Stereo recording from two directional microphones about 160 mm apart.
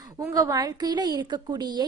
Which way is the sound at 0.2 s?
20° right (ahead or behind).